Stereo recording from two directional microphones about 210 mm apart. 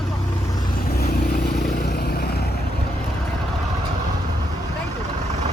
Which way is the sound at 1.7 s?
45° left (ahead or behind).